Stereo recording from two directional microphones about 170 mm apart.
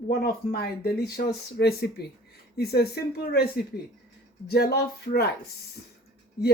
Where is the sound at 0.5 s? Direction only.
70° left (ahead or behind).